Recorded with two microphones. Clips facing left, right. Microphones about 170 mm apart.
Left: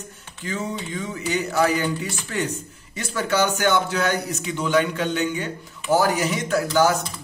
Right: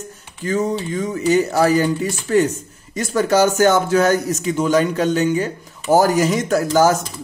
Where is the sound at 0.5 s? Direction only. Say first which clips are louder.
Right 8 dB; 40° right (ahead or behind).